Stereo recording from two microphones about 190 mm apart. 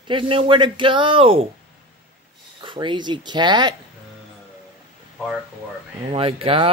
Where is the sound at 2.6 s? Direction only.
25° right (ahead or behind).